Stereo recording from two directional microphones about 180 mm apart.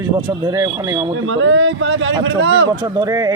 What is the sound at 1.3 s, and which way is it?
A man's voice, 90° right.